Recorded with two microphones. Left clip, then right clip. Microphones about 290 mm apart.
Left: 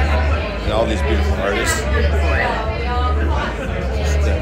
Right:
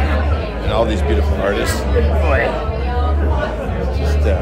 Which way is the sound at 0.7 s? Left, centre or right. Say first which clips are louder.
Right 2 dB; centre.